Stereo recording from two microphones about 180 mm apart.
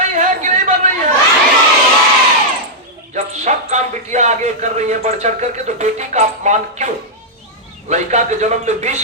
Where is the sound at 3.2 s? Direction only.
40° right (ahead or behind).